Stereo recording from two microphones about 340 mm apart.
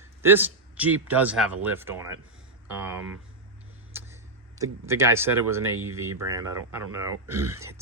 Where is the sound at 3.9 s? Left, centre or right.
Centre.